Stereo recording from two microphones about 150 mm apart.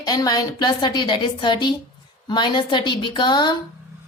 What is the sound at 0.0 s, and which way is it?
A woman's voice, 25° left (ahead or behind).